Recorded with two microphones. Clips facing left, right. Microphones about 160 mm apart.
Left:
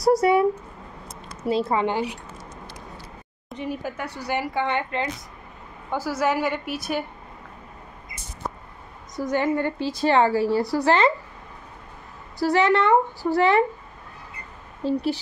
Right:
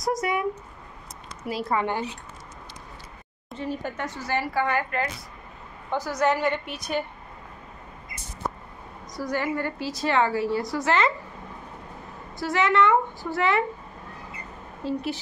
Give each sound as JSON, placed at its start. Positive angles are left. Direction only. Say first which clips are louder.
{"t": 0.0, "sound": "a woman's voice", "louder": "left 8 dB", "side_deg": 30}
{"t": 3.5, "sound": "speech", "louder": "left 1 dB", "side_deg": 10}
{"t": 5.9, "sound": "speech", "louder": "even", "side_deg": 5}
{"t": 9.2, "sound": "a woman's voice", "louder": "left 4 dB", "side_deg": 20}
{"t": 12.4, "sound": "a woman's voice", "louder": "left 3 dB", "side_deg": 35}